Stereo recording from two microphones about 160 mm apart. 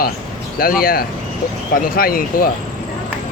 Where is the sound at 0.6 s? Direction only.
65° left (ahead or behind).